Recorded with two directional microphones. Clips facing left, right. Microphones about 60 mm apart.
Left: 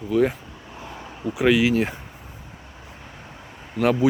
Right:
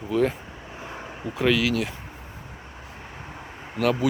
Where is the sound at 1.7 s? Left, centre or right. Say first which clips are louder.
Left 4 dB; left.